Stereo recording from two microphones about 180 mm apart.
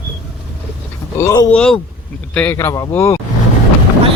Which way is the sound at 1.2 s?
20° left (ahead or behind).